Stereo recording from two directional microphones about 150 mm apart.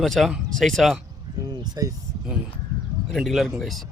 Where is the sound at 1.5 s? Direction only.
25° right (ahead or behind).